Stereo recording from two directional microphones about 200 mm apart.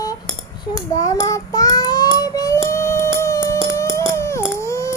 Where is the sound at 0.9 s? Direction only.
15° left (ahead or behind).